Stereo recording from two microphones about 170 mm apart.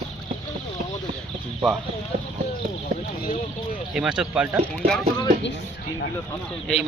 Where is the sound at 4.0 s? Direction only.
5° right (ahead or behind).